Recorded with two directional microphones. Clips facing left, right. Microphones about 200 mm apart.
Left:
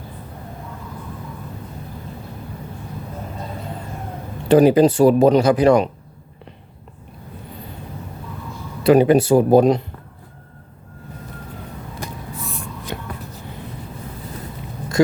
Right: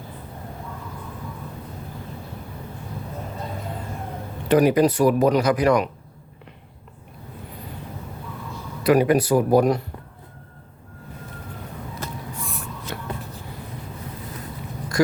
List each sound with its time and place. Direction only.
4.4 s speech: 30° left (ahead or behind)
8.8 s speech: 25° left (ahead or behind)
11.9 s a sound: 15° left (ahead or behind)
12.9 s vehicle: 20° left (ahead or behind)